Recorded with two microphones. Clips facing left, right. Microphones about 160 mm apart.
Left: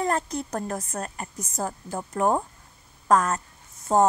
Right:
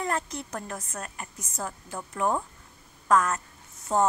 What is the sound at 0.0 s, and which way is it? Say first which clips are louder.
A woman's voice: left 4 dB; 40° left (ahead or behind).